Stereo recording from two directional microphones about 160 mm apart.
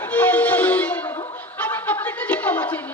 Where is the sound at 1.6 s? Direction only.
10° left (ahead or behind).